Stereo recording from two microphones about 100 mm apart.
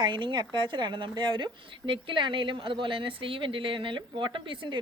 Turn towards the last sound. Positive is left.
turn(degrees=-55)  # may be behind; listen again after turning